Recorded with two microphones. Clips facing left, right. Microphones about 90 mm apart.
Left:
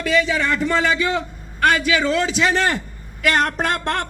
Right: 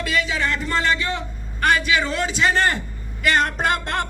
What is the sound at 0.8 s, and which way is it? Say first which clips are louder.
A man's voice: left 3 dB; 90° left.